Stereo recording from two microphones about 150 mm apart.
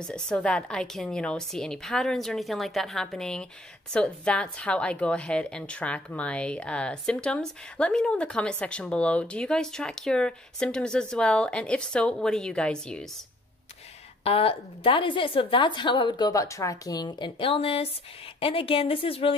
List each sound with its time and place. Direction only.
0.0 s a woman's voice: 5° left (ahead or behind)
14.2 s a woman's voice: 40° left (ahead or behind)